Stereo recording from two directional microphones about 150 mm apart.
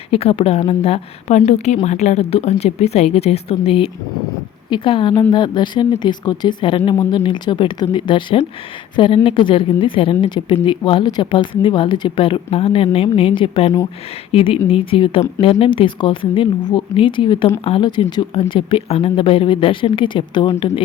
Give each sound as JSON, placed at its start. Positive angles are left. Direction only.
{"t": 0.1, "sound": "a woman's voice", "side_deg": 40}